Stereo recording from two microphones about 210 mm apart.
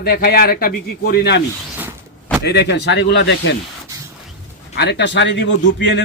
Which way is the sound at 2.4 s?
50° left (ahead or behind).